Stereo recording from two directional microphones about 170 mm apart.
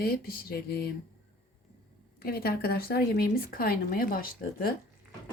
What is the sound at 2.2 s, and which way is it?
Speech, 65° left (ahead or behind).